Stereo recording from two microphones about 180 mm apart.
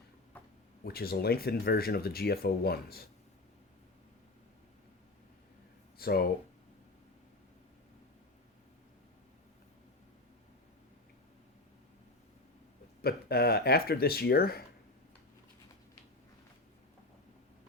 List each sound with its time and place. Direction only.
0.9 s speech: 60° left (ahead or behind)
6.0 s speech: 60° left (ahead or behind)
13.0 s speech: 60° left (ahead or behind)